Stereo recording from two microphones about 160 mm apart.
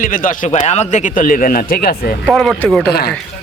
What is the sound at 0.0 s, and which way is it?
A man's voice, 60° left (ahead or behind).